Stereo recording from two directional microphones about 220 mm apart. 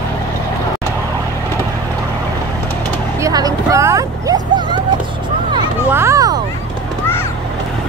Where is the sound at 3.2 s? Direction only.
15° right (ahead or behind).